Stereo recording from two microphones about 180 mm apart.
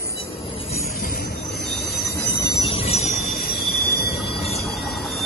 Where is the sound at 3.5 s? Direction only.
60° left (ahead or behind).